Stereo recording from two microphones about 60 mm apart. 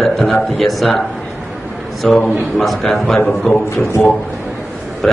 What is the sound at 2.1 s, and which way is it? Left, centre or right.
Speech, left.